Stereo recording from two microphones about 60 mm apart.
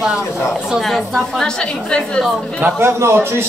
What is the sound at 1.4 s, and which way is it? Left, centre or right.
Speech, centre.